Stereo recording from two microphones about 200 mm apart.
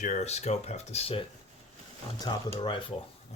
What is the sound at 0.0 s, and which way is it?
Speech, 35° left (ahead or behind).